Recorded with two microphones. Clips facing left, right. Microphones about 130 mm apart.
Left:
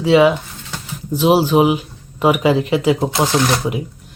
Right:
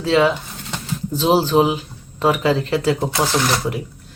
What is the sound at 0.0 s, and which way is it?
Speech, 15° left (ahead or behind).